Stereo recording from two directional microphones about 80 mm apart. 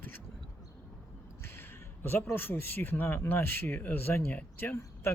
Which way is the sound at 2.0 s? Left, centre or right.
Left.